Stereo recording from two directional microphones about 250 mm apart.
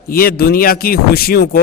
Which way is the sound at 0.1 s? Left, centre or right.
Left.